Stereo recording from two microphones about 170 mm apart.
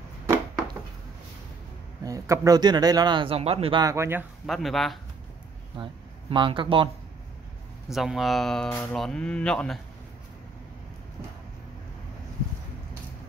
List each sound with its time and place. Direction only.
2.0 s speech: 20° right (ahead or behind); by 3.8 s 35° right (ahead or behind)
3.8 s speech: 15° right (ahead or behind)
4.5 s speech: centre (ahead or behind)
5.8 s speech: 30° right (ahead or behind)
7.9 s speech: centre (ahead or behind)